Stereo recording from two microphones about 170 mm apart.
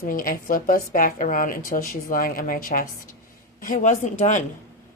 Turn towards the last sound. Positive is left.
turn(degrees=45)  # may be behind; listen again after turning